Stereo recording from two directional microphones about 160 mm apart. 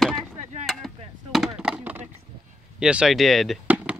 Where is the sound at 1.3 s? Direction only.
Centre (ahead or behind).